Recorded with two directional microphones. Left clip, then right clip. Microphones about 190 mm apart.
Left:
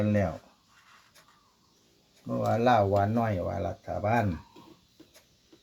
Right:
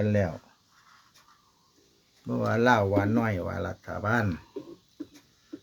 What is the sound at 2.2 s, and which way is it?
Speech, 50° right (ahead or behind).